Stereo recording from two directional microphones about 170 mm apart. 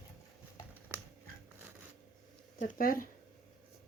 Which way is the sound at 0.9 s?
10° right (ahead or behind).